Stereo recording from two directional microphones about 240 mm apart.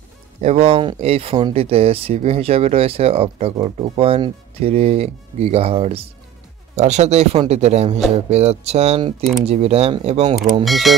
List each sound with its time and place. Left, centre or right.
0.4 s speech: right
10.6 s mechanisms: centre